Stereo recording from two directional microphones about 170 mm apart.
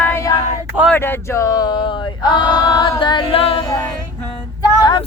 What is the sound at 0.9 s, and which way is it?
Male singing, 10° left (ahead or behind).